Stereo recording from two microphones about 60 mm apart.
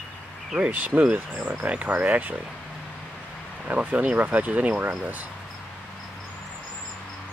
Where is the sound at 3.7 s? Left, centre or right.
Right.